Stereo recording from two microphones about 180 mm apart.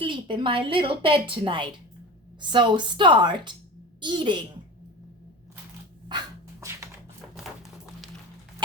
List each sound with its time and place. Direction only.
0.0 s a woman's voice: 25° right (ahead or behind)
6.1 s dog: 25° right (ahead or behind)